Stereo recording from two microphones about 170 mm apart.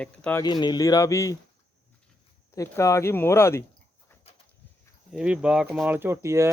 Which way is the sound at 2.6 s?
20° left (ahead or behind).